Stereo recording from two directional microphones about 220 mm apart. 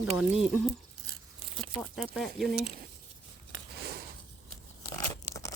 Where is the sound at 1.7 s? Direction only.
5° left (ahead or behind).